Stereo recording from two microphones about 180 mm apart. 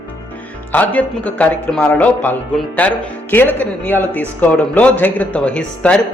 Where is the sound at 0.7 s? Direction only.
10° left (ahead or behind).